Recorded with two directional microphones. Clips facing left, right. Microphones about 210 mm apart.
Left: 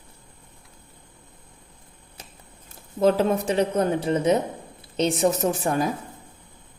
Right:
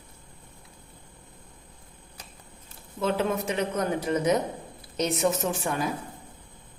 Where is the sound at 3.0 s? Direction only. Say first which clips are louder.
Left 6 dB; 40° left (ahead or behind).